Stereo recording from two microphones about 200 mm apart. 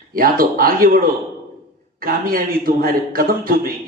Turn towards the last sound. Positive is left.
turn(degrees=-45)  # may be behind; listen again after turning